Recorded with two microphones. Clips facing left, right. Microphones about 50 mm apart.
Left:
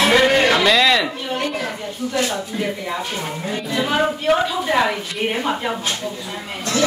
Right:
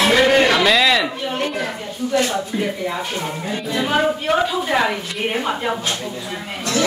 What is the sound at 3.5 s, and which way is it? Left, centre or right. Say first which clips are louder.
A woman's voice: even; centre.